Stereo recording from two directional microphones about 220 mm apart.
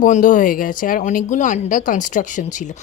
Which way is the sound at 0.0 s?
35° left (ahead or behind).